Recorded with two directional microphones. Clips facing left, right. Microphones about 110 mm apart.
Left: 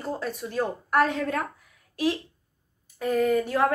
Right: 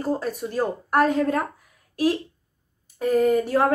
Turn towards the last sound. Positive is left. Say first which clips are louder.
# right 3 dB
turn(degrees=-40)  # may be behind; listen again after turning